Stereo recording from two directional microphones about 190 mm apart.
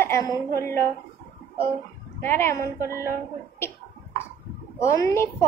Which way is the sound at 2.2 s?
10° left (ahead or behind).